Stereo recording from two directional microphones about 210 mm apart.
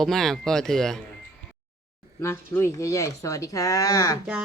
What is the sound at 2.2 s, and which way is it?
Speech, 10° left (ahead or behind).